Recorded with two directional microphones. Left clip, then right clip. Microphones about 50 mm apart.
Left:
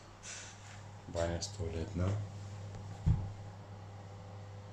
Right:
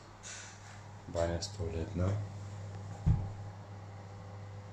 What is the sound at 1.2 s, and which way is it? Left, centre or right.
Speech, centre.